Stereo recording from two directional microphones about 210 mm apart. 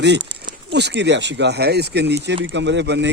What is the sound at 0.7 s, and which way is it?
Speech, 55° right (ahead or behind).